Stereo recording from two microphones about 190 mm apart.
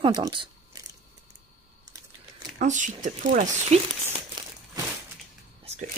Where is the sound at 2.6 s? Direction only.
40° right (ahead or behind).